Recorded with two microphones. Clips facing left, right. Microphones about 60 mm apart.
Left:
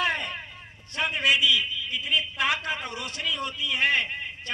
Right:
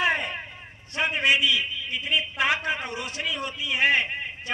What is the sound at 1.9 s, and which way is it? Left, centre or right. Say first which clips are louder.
A man's voice: right 2 dB; centre.